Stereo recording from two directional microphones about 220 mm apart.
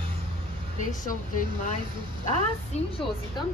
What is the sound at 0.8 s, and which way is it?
Speech, 35° left (ahead or behind).